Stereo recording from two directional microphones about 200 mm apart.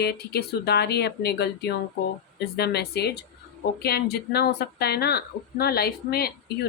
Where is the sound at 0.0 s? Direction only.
55° left (ahead or behind).